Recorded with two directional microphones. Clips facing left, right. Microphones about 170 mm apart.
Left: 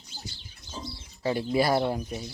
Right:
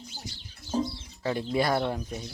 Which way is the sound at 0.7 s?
60° right (ahead or behind).